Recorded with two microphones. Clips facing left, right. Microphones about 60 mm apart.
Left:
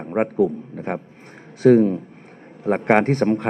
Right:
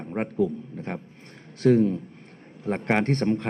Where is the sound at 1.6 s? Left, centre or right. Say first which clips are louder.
Left 6 dB; left.